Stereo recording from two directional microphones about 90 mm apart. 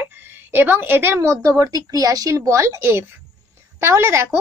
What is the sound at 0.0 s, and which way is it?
A woman's voice, 20° right (ahead or behind).